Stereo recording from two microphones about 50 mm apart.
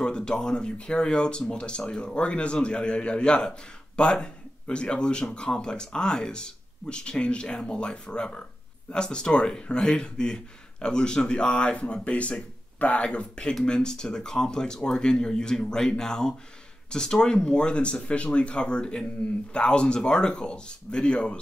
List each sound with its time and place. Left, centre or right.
0.0 s speech: centre